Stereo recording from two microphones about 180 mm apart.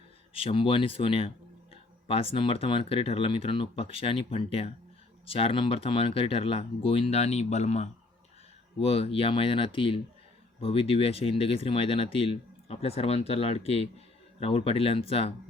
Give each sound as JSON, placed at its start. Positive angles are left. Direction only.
{"t": 0.3, "sound": "speech", "side_deg": 30}